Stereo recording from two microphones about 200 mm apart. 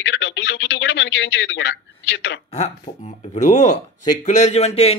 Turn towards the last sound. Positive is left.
turn(degrees=30)  # may be behind; listen again after turning